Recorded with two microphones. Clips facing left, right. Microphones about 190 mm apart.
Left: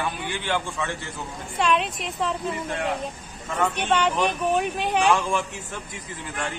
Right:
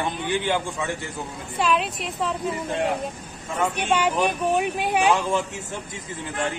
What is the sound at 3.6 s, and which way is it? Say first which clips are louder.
Speech: even; 10° right (ahead or behind).